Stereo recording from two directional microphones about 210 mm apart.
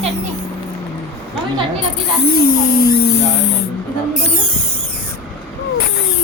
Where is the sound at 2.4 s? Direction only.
40° left (ahead or behind).